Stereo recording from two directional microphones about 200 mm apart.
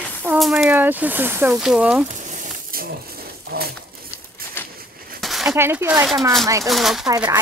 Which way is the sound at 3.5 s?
50° right (ahead or behind).